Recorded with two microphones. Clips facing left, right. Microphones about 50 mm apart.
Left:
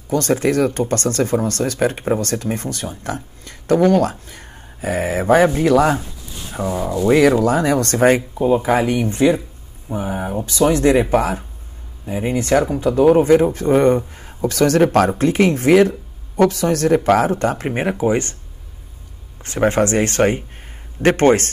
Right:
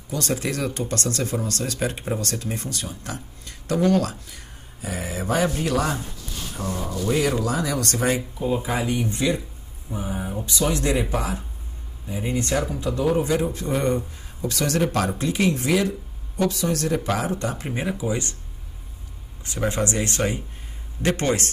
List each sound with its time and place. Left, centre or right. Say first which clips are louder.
0.1 s speech: left 9 dB; left
6.8 s rub: left 9 dB; left
7.1 s speech: left 10 dB; left
7.4 s speech: left 8 dB; left
19.4 s speech: left 8 dB; left